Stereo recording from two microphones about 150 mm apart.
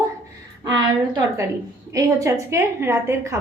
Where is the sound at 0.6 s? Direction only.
25° right (ahead or behind).